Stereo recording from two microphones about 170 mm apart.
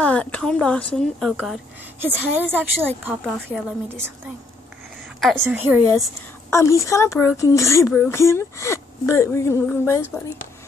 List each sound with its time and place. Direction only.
0.0 s a woman's voice: 5° left (ahead or behind)
2.0 s a woman's voice: 10° right (ahead or behind)
5.4 s a woman's voice: 10° right (ahead or behind)
6.5 s a child's voice: 15° left (ahead or behind)